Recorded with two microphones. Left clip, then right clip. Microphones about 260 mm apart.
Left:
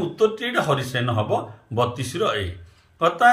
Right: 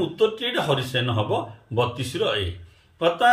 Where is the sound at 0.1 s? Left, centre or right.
Centre.